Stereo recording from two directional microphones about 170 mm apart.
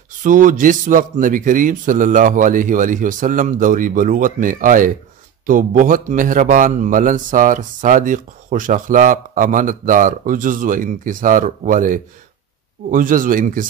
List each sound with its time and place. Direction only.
0.2 s a man's voice: 50° right (ahead or behind)